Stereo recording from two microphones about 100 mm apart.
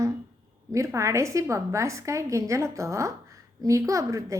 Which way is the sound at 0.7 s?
30° right (ahead or behind).